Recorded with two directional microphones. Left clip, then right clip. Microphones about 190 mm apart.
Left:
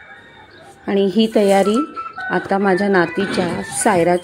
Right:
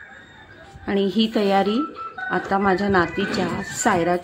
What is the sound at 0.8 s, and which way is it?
A woman's voice, 15° left (ahead or behind).